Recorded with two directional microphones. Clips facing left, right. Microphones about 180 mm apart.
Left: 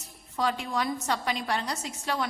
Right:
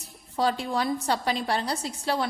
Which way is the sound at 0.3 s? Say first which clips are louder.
Right 3 dB; 35° right (ahead or behind).